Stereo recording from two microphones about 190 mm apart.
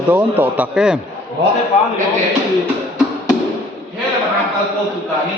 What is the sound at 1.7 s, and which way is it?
Speech, 30° left (ahead or behind).